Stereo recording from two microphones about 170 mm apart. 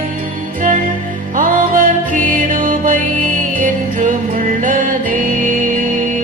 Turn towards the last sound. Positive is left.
turn(degrees=-50)  # may be behind; listen again after turning